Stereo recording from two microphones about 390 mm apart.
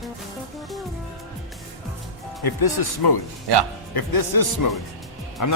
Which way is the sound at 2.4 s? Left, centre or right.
Left.